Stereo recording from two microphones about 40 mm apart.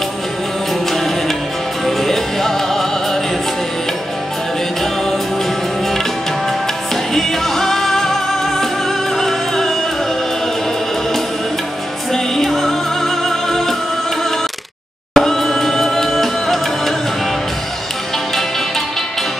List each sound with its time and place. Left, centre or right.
0.8 s music: centre
7.2 s music: centre
12.1 s music: centre
15.1 s music: centre